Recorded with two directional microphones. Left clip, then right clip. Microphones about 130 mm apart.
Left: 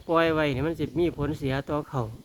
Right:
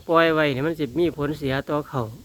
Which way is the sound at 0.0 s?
15° right (ahead or behind).